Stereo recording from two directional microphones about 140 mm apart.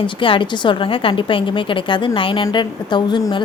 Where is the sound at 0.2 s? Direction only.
35° left (ahead or behind).